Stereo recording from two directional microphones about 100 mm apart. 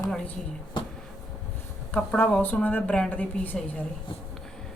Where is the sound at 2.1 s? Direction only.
15° left (ahead or behind).